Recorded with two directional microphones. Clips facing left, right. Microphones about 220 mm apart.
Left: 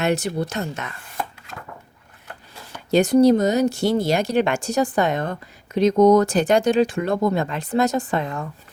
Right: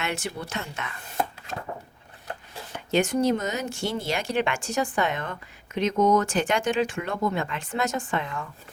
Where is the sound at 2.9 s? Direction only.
35° left (ahead or behind).